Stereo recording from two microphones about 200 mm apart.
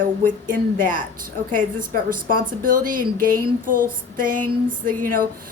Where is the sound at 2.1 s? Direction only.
45° right (ahead or behind).